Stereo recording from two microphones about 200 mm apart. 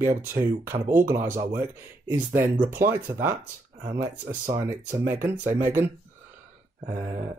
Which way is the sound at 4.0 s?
40° right (ahead or behind).